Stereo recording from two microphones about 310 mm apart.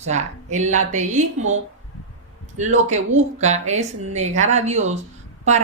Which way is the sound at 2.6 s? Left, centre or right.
Right.